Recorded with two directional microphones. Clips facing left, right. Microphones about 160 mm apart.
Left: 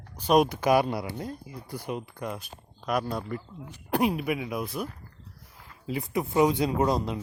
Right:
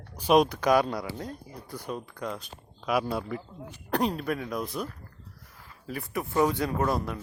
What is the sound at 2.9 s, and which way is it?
Speech, 5° right (ahead or behind).